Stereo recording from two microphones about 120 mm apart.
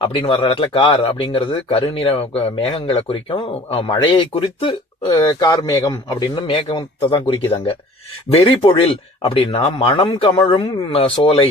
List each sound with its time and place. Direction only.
0.0 s speech: 50° left (ahead or behind)
5.0 s a man's voice: 35° left (ahead or behind)
6.5 s speech: 45° left (ahead or behind)